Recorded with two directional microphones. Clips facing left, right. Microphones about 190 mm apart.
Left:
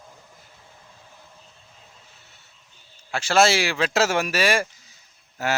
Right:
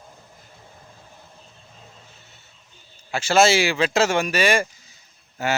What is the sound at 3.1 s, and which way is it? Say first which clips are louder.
Speech: right 2 dB; centre (ahead or behind).